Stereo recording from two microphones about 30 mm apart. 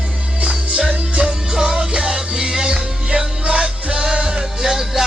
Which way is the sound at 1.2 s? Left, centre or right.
Right.